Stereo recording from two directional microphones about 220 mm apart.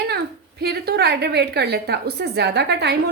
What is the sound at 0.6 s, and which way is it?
A woman's voice, 45° right (ahead or behind).